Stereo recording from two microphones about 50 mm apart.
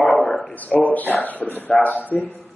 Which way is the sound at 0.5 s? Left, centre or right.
Left.